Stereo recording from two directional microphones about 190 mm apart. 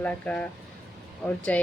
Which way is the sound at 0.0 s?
5° left (ahead or behind).